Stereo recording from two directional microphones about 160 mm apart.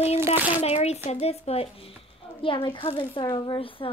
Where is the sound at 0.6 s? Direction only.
40° left (ahead or behind).